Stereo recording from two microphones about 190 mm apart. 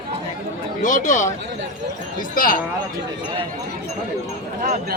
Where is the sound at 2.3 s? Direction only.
50° left (ahead or behind).